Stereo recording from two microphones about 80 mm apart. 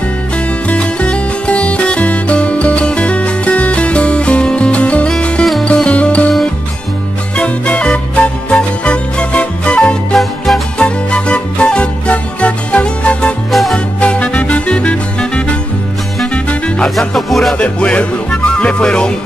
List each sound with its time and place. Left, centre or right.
0.7 s music: centre
7.3 s music: centre
10.1 s music: centre
10.8 s music: centre
13.5 s music: centre
13.9 s music: centre
17.0 s music: centre
17.6 s music: centre